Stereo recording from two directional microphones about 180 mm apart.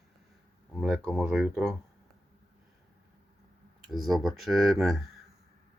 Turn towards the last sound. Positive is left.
turn(degrees=0)  # may be behind; listen again after turning